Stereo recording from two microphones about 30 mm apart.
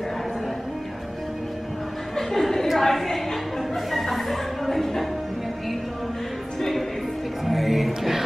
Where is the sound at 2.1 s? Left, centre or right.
Centre.